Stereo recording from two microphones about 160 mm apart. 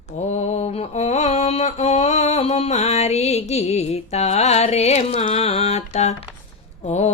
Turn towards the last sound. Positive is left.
turn(degrees=45)  # may be behind; listen again after turning